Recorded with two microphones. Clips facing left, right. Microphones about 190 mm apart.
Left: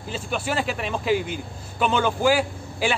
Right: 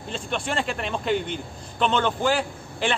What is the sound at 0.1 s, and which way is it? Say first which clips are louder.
A man's voice: left 1 dB; 5° left (ahead or behind).